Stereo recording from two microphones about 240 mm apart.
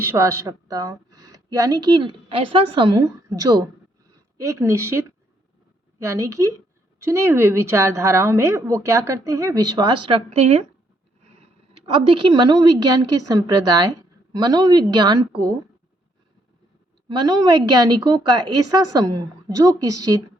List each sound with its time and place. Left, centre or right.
0.0 s a woman's voice: centre
12.1 s a woman's voice: centre
17.1 s a woman's voice: centre